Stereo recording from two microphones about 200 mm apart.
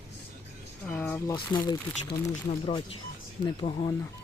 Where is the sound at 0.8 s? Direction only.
10° left (ahead or behind).